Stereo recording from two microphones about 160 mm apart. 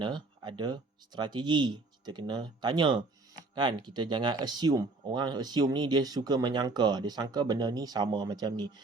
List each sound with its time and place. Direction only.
0.0 s speech: 30° right (ahead or behind)